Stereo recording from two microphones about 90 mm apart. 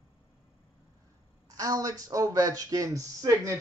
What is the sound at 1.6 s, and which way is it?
Speech, 40° right (ahead or behind).